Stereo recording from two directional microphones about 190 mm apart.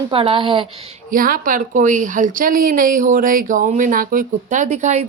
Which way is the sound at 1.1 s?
45° right (ahead or behind).